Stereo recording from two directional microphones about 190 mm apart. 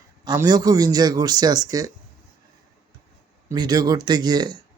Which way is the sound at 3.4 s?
20° right (ahead or behind).